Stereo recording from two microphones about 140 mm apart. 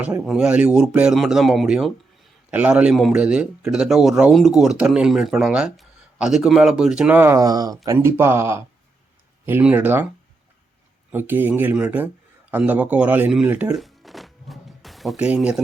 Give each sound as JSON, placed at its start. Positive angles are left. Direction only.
{"t": 0.0, "sound": "a man's voice", "side_deg": -5}
{"t": 7.9, "sound": "speech", "side_deg": -15}
{"t": 11.1, "sound": "speech", "side_deg": -15}